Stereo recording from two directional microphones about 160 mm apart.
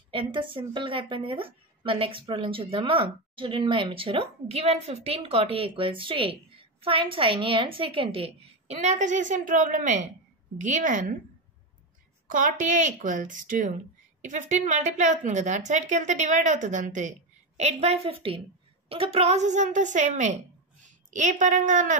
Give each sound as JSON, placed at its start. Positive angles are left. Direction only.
{"t": 0.1, "sound": "a woman's voice", "side_deg": -30}
{"t": 12.3, "sound": "a woman's voice", "side_deg": -55}